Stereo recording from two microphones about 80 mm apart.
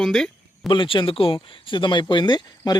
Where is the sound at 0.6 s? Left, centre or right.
Left.